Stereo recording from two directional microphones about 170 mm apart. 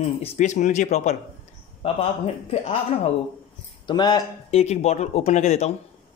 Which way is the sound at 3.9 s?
25° left (ahead or behind).